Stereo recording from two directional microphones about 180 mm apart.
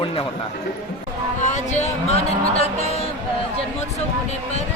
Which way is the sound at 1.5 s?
40° left (ahead or behind).